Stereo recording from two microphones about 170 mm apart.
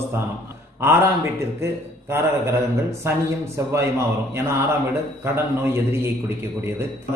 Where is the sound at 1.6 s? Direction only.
15° right (ahead or behind).